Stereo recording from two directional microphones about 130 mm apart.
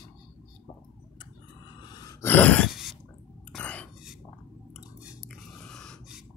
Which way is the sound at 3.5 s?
10° left (ahead or behind).